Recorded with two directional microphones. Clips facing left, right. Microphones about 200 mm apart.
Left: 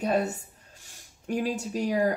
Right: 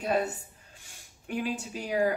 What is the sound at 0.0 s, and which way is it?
Speech, 40° left (ahead or behind).